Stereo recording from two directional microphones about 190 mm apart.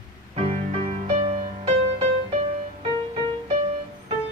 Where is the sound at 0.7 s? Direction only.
30° right (ahead or behind).